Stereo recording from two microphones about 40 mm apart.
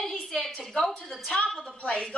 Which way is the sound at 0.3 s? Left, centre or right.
Centre.